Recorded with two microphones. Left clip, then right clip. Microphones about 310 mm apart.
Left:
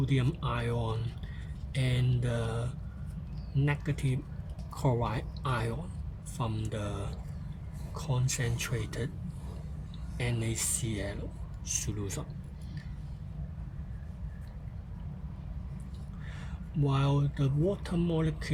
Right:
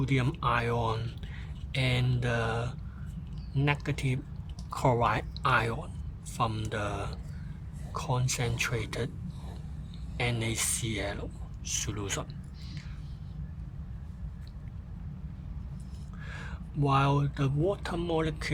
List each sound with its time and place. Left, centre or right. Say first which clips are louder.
0.0 s speech: right 4 dB; right
10.2 s speech: right 4 dB; right
16.8 s speech: right 5 dB; right
17.9 s speech: right 2 dB; right
18.2 s speech: right 3 dB; right